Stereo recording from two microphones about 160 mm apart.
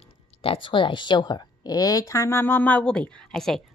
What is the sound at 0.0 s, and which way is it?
A woman's voice, 35° left (ahead or behind).